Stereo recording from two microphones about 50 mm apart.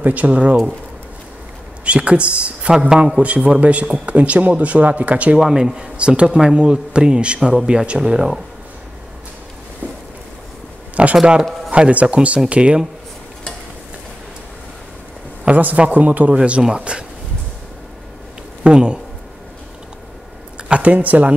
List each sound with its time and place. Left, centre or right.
0.0 s speech: right
1.9 s speech: right
5.4 s speech: centre
11.0 s a sound: right
11.7 s speech: right
15.4 s a woman's voice: right
18.6 s speech: centre
20.5 s speech: right